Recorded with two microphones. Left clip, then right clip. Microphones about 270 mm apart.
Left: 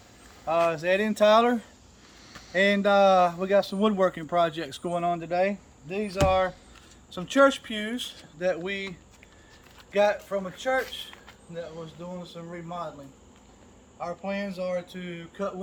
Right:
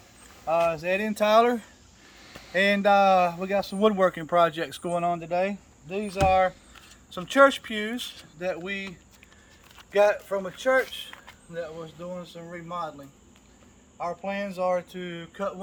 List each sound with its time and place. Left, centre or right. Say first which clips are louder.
0.4 s speech: even; centre
9.7 s speech: right 2 dB; centre
14.0 s speech: right 2 dB; centre